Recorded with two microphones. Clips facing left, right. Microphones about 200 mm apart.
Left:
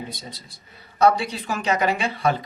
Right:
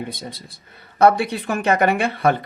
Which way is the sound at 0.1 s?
55° right (ahead or behind).